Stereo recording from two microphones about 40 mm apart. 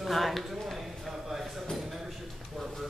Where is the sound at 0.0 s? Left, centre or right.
Centre.